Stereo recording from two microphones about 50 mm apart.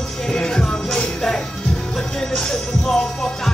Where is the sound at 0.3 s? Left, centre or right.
Centre.